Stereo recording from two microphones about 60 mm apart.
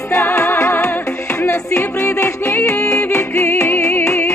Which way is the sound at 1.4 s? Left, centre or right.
Left.